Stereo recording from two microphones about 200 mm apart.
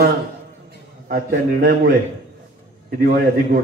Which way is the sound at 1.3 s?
55° right (ahead or behind).